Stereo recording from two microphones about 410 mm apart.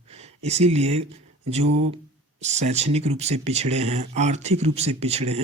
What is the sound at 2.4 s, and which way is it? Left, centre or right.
Speech, centre.